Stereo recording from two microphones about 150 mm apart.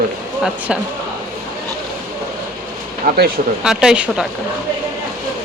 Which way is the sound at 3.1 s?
90° right.